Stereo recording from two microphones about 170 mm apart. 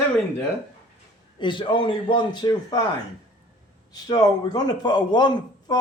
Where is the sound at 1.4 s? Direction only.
30° left (ahead or behind).